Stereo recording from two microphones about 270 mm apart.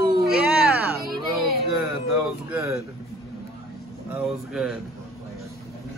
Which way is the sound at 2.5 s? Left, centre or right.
Centre.